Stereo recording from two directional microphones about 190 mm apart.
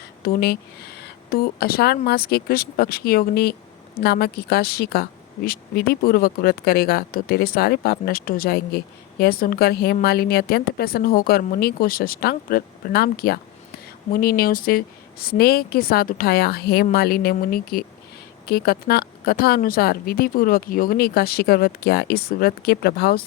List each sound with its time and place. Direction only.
0.2 s a woman's voice: 55° left (ahead or behind)